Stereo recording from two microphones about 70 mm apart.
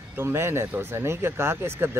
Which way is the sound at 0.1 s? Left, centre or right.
Right.